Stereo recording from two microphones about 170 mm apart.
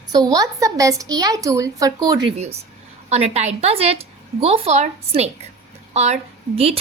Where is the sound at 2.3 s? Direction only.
40° right (ahead or behind).